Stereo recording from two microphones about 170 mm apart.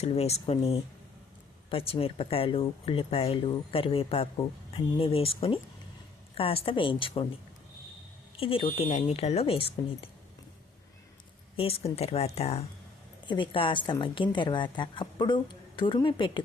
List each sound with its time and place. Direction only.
0.0 s speech: 35° left (ahead or behind)
8.4 s speech: 30° left (ahead or behind)
11.5 s a woman's voice: 35° left (ahead or behind)